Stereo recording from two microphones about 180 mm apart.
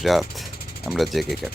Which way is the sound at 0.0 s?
Centre (ahead or behind).